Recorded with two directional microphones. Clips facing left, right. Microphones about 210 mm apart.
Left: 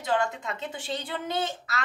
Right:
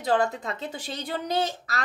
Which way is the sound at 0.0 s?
35° right (ahead or behind).